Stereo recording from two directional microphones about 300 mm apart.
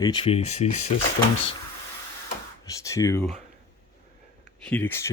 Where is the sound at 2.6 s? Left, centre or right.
Centre.